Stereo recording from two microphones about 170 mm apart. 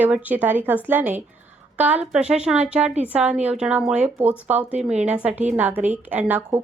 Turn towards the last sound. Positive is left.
turn(degrees=-10)  # may be behind; listen again after turning